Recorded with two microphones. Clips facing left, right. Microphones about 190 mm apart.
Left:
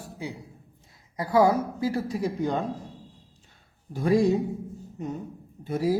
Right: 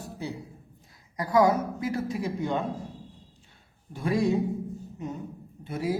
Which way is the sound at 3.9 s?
40° left (ahead or behind).